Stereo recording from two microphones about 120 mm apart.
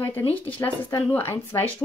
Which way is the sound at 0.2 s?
50° left (ahead or behind).